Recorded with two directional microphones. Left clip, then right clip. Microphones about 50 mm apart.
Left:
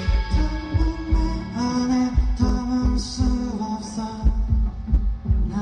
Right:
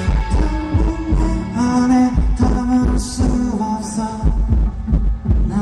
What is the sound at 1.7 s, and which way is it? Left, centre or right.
Music, right.